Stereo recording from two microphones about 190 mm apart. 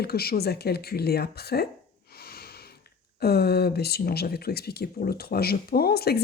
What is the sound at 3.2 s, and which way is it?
Speech, 55° left (ahead or behind).